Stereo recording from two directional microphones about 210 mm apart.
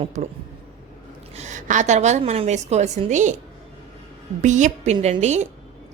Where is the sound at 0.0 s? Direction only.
35° right (ahead or behind).